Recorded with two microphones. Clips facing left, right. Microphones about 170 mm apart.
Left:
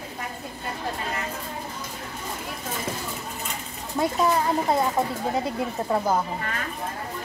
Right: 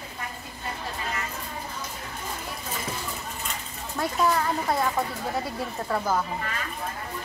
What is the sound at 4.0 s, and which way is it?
A child's voice, 15° left (ahead or behind).